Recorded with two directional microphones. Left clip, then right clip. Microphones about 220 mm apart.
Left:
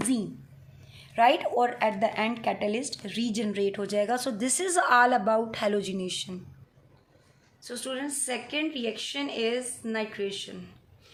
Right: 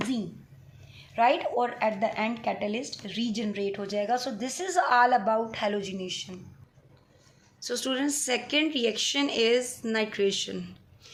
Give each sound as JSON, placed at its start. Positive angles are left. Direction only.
{"t": 0.9, "sound": "a woman's voice", "side_deg": 25}
{"t": 7.6, "sound": "speech", "side_deg": -45}